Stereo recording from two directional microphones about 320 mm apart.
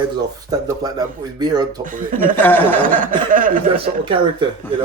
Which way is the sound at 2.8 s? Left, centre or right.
Right.